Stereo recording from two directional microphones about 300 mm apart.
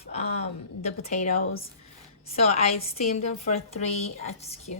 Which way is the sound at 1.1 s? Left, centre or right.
Left.